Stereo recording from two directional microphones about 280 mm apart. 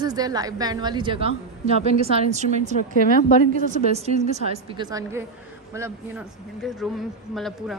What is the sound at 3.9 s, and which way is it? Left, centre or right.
A woman's voice, right.